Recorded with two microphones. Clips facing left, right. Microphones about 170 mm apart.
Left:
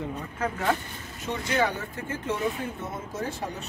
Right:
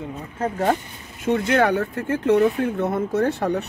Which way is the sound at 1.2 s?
65° right (ahead or behind).